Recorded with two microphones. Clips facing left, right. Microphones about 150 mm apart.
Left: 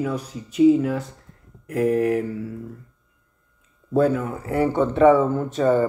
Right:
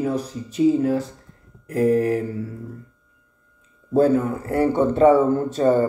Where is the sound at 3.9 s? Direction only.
35° right (ahead or behind).